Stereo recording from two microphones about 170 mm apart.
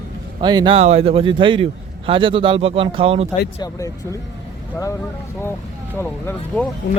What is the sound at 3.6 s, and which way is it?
Speech, 20° left (ahead or behind).